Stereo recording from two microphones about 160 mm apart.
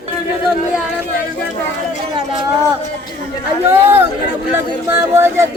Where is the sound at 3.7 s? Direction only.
15° right (ahead or behind).